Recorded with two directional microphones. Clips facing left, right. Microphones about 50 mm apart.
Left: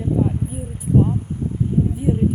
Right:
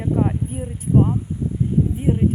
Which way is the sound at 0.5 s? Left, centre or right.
Right.